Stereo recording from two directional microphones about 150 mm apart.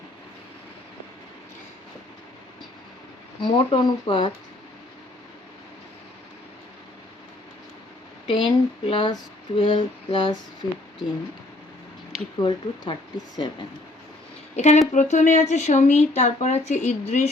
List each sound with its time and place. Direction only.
3.4 s speech: 35° left (ahead or behind)
8.3 s speech: 35° left (ahead or behind)
12.4 s speech: 30° left (ahead or behind)
14.5 s a woman's voice: 50° left (ahead or behind)